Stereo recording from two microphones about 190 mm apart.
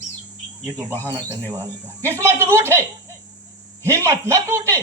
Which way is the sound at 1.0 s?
15° right (ahead or behind).